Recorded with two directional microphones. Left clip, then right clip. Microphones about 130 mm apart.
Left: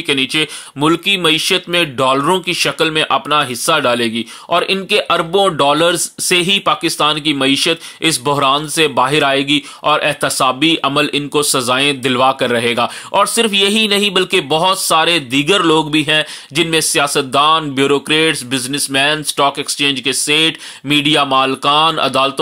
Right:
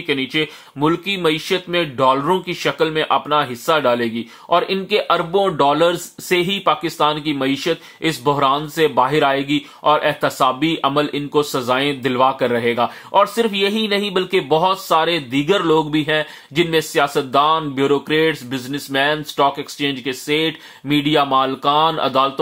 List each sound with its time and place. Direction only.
0.0 s speech: 30° left (ahead or behind)